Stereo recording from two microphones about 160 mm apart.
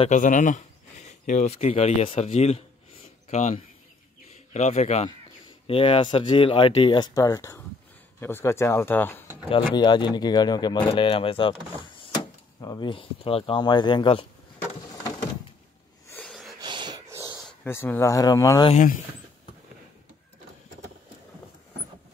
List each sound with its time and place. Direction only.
0.1 s a man's voice: 50° left (ahead or behind)
5.7 s speech: 35° left (ahead or behind); by 9.2 s 10° left (ahead or behind)
9.5 s speech: 30° left (ahead or behind)
16.3 s a sound: centre (ahead or behind)
16.5 s a sound: 30° right (ahead or behind)
17.6 s speech: 15° left (ahead or behind)